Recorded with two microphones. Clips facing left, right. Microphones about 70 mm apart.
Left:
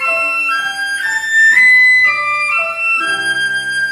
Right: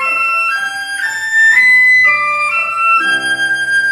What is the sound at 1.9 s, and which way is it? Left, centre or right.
Music, right.